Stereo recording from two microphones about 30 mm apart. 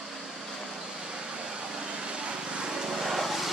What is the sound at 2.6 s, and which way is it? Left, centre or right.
Vehicle, centre.